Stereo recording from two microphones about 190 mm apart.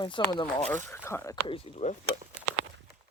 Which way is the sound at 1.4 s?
30° left (ahead or behind).